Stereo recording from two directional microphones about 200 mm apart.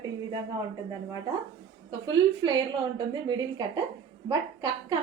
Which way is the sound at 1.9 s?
25° right (ahead or behind).